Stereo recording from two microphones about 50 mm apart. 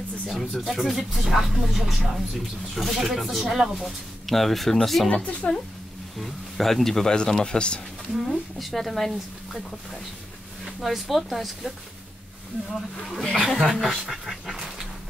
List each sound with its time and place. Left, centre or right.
0.3 s speech: centre
5.4 s a woman's voice: centre
6.1 s speech: centre
8.1 s speech: centre
10.6 s speech: centre
12.7 s speech: centre